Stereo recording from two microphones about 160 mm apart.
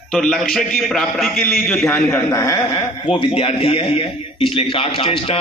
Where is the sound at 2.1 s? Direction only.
15° left (ahead or behind).